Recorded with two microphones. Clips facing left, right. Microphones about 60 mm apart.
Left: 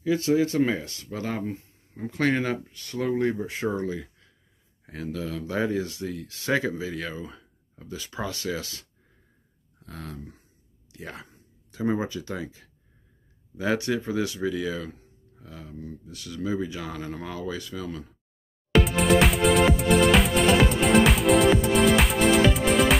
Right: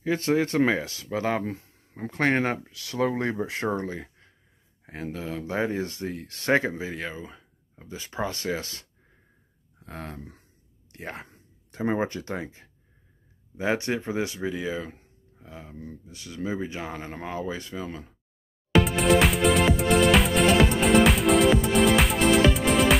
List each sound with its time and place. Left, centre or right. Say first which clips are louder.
0.0 s speech: left 1 dB; right
2.6 s speech: right 3 dB; right
3.6 s speech: left 3 dB; right
4.8 s speech: left 1 dB; right
6.6 s speech: left 1 dB; right
9.8 s speech: right 1 dB; right
16.1 s speech: left 3 dB; right
16.3 s speech: left 1 dB; right
18.7 s music: even; centre